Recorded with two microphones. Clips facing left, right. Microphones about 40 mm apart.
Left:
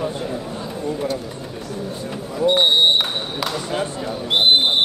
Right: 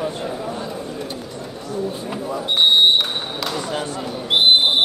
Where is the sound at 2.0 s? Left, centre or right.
Centre.